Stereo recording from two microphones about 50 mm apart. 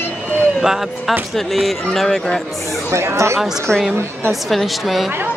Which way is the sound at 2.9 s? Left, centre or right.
Right.